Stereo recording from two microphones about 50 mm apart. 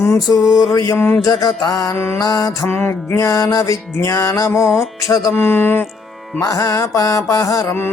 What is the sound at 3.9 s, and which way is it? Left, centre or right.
Mantra, left.